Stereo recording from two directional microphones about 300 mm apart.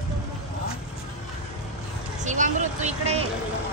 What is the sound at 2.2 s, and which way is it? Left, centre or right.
Speech, right.